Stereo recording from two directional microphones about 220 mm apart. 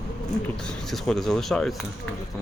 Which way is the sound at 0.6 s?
Centre (ahead or behind).